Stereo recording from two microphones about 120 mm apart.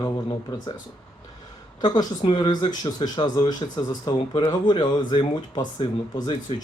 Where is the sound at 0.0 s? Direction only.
30° left (ahead or behind).